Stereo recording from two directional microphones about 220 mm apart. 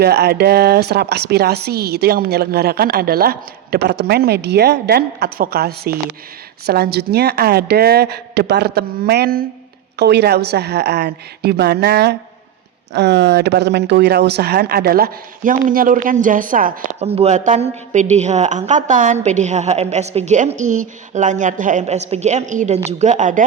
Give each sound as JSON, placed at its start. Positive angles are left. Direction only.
{"t": 0.0, "sound": "speech", "side_deg": -45}